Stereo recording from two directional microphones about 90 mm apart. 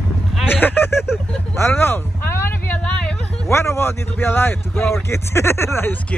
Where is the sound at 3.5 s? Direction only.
30° left (ahead or behind).